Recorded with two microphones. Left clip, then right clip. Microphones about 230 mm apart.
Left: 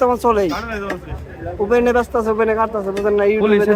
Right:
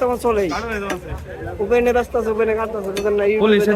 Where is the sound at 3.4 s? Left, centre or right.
Centre.